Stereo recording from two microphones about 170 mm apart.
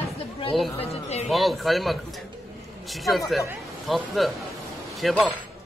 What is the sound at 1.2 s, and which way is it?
Speech, centre (ahead or behind).